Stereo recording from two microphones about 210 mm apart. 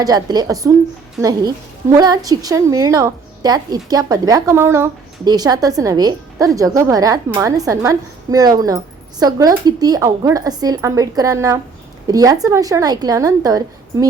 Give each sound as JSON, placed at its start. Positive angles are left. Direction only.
{"t": 0.0, "sound": "a woman's voice", "side_deg": -20}